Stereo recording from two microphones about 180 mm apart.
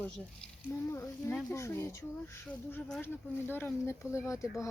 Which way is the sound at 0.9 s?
15° left (ahead or behind).